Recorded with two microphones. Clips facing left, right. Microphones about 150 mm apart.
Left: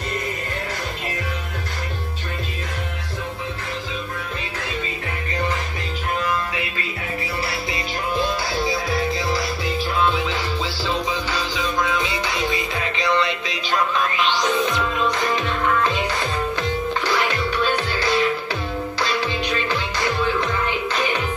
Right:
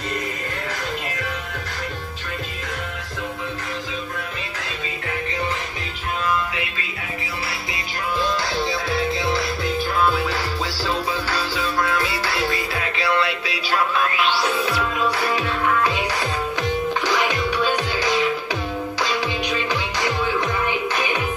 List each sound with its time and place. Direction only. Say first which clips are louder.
8.2 s music: right 1 dB; 10° left (ahead or behind)
9.1 s music: right 1 dB; centre (ahead or behind)
11.6 s music: even; 15° left (ahead or behind)
12.7 s music: left 1 dB; 5° right (ahead or behind)